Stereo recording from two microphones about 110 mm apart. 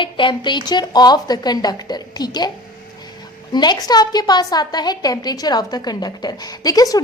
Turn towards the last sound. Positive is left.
turn(degrees=35)  # may be behind; listen again after turning